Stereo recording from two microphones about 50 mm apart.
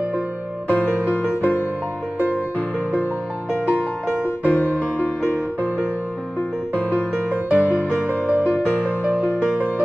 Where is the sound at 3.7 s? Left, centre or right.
Left.